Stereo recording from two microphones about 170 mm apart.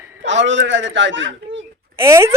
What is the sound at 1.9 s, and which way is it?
Speech, 15° right (ahead or behind).